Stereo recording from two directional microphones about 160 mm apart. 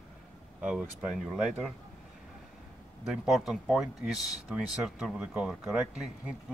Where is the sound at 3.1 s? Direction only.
Centre (ahead or behind).